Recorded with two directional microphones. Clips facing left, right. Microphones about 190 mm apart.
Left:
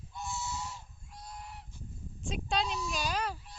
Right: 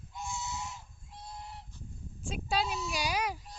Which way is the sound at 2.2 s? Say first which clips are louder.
Even; centre (ahead or behind).